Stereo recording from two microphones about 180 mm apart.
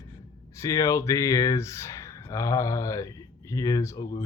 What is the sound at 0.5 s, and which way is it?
Speech, 15° left (ahead or behind).